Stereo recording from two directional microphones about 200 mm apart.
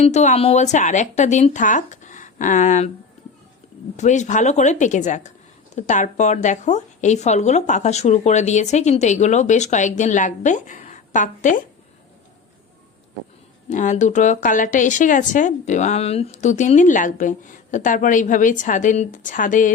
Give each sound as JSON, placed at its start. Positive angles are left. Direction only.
{"t": 0.0, "sound": "speech", "side_deg": 35}
{"t": 3.9, "sound": "speech", "side_deg": 35}
{"t": 13.7, "sound": "speech", "side_deg": 40}